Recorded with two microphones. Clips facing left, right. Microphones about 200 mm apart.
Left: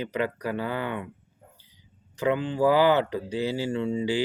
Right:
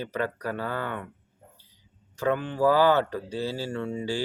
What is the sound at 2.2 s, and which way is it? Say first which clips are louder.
Speech: left 1 dB; 15° left (ahead or behind).